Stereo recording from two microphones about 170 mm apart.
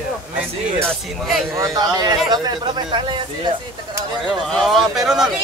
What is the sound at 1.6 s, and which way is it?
Speech, 20° right (ahead or behind).